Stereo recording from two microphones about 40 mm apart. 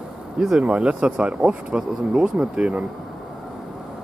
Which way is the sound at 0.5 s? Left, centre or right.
Right.